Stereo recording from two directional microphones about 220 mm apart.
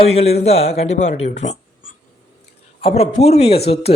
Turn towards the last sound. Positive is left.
turn(degrees=25)  # may be behind; listen again after turning